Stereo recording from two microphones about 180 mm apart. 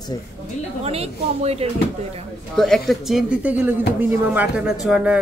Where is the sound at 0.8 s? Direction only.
35° right (ahead or behind).